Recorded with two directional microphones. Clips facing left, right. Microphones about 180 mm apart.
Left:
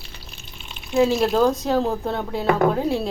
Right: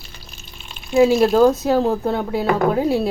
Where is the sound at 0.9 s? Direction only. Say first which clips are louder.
Right 5 dB; 10° right (ahead or behind).